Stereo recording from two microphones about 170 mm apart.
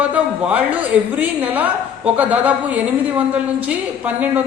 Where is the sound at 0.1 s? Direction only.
10° right (ahead or behind).